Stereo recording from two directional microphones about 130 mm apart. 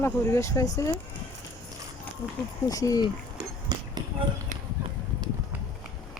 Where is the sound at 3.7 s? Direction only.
35° right (ahead or behind).